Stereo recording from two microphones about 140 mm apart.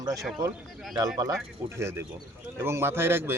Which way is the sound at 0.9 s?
25° right (ahead or behind).